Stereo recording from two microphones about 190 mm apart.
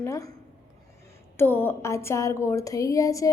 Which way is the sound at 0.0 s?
15° left (ahead or behind).